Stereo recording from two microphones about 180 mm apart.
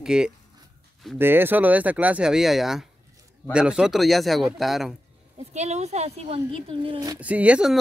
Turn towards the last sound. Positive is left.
turn(degrees=-5)  # may be behind; listen again after turning